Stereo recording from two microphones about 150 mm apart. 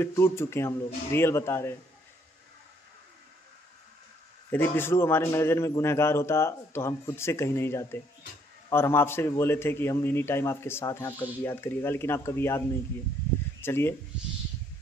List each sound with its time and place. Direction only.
0.0 s a man's voice: 15° left (ahead or behind)
4.5 s a man's voice: 15° left (ahead or behind)